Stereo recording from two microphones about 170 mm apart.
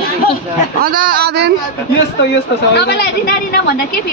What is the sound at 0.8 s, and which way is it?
Speech, 60° right (ahead or behind).